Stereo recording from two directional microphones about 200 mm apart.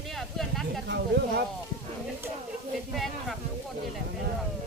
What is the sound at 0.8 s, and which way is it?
Speech, 60° right (ahead or behind).